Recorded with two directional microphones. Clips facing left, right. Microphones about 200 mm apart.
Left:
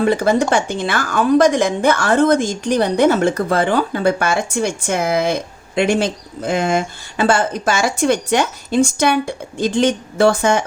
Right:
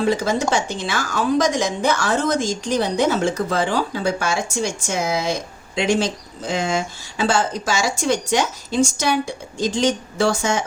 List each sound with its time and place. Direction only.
0.0 s a woman's voice: 55° left (ahead or behind)